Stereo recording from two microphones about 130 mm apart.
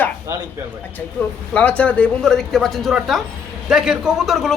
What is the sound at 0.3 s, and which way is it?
Speech, 25° right (ahead or behind).